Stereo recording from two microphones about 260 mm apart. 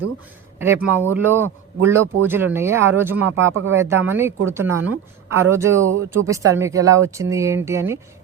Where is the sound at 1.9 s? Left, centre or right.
Centre.